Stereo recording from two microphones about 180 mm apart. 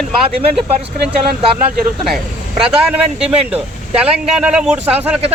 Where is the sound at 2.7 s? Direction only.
5° right (ahead or behind).